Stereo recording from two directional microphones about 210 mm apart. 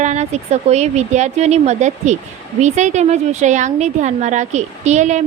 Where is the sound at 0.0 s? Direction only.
35° right (ahead or behind).